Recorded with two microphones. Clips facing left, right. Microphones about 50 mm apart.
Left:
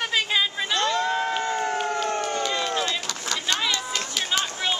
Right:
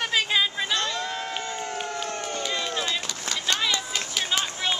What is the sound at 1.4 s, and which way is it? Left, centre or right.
Crowd, left.